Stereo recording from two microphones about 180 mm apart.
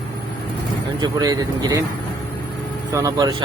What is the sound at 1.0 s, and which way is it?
Speech, 20° right (ahead or behind).